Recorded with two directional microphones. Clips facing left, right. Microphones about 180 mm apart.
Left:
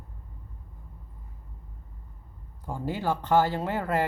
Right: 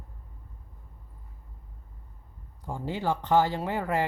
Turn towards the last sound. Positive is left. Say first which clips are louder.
# left 1 dB
turn(degrees=-15)  # may be behind; listen again after turning